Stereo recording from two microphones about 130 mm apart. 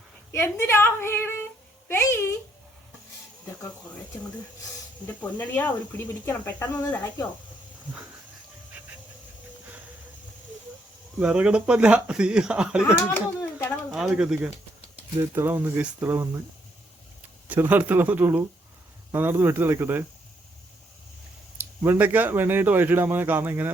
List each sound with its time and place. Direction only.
0.3 s a woman's voice: 20° left (ahead or behind)
5.2 s speech: 15° left (ahead or behind)
11.2 s speech: 10° right (ahead or behind)
12.8 s speech: 20° left (ahead or behind)
13.9 s speech: 5° right (ahead or behind)
15.2 s speech: 20° right (ahead or behind)
17.5 s speech: 15° right (ahead or behind)
21.6 s speech: 15° right (ahead or behind)